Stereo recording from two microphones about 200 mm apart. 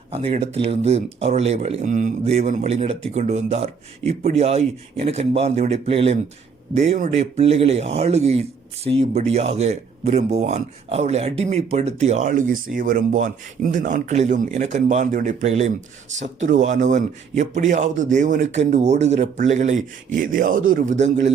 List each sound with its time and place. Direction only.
0.1 s a man's voice: 30° right (ahead or behind)